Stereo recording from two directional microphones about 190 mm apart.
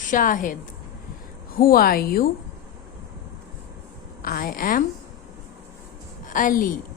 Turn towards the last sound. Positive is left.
turn(degrees=45)  # may be behind; listen again after turning